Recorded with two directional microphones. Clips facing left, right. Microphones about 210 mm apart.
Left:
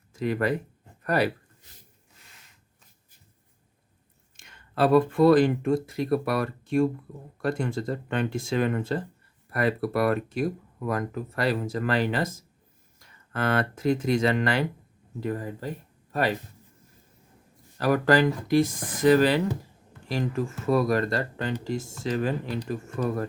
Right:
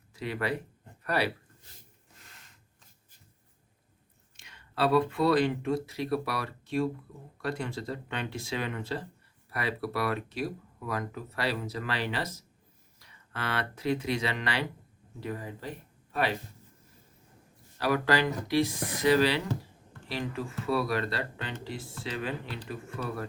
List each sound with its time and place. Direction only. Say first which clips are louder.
0.1 s speech: left 6 dB; 45° left (ahead or behind)
4.4 s speech: left 6 dB; 50° left (ahead or behind)
17.7 s speech: left 6 dB; 45° left (ahead or behind)